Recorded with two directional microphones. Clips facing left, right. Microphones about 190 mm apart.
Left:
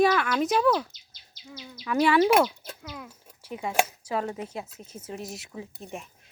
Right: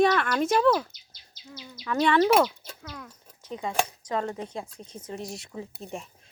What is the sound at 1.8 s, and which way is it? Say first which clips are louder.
Speech: left 1 dB; 10° left (ahead or behind).